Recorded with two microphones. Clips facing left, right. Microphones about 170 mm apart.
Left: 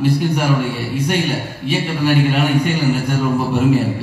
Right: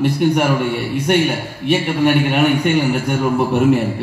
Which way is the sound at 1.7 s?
60° right (ahead or behind).